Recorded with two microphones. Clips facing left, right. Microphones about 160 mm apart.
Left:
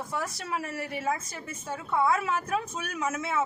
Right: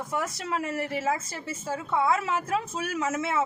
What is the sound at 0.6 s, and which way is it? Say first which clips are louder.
Speech: right 5 dB; 25° right (ahead or behind).